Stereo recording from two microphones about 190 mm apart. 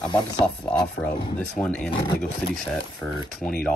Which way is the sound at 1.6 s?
5° left (ahead or behind).